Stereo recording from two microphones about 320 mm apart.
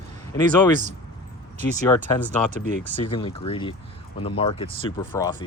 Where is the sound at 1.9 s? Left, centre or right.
Centre.